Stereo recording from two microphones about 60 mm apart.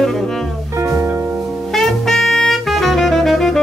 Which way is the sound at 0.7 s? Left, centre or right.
Right.